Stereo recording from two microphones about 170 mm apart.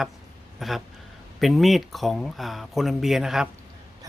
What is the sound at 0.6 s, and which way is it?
Speech, centre (ahead or behind).